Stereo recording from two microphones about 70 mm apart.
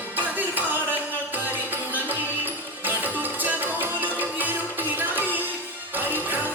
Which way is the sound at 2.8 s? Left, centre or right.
Right.